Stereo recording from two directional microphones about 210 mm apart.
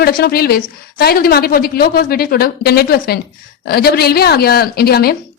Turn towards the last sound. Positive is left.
turn(degrees=45)  # may be behind; listen again after turning